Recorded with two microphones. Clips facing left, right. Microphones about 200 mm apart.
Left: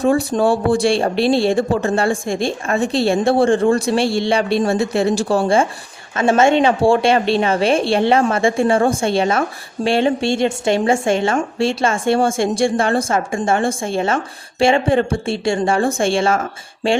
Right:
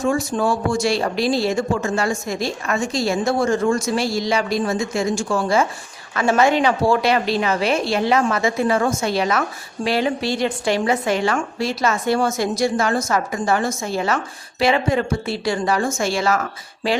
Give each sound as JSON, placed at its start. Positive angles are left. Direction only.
{"t": 0.0, "sound": "a woman's voice", "side_deg": 35}